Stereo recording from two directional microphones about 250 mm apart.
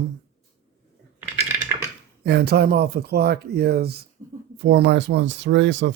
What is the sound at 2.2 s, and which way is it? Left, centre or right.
Speech, right.